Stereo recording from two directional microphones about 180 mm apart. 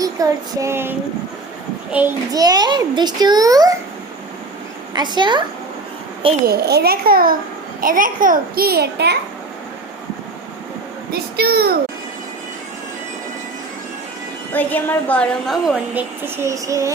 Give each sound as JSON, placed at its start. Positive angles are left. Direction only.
{"t": 0.0, "sound": "a sound", "side_deg": -20}
{"t": 2.3, "sound": "a child's voice", "side_deg": -20}
{"t": 4.9, "sound": "a child's voice", "side_deg": -25}
{"t": 6.4, "sound": "a child's voice", "side_deg": -60}
{"t": 11.1, "sound": "a child's voice", "side_deg": -60}
{"t": 14.5, "sound": "a woman's voice", "side_deg": 10}
{"t": 16.2, "sound": "a sound", "side_deg": -15}